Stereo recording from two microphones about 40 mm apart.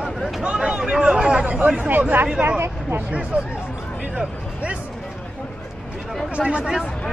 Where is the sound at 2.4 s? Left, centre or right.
Right.